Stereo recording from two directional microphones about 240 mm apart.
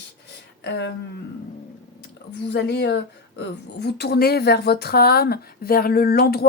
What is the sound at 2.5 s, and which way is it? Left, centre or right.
A woman's voice, left.